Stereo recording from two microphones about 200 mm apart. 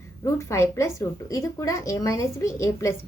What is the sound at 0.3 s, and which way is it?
A woman's voice, 15° left (ahead or behind).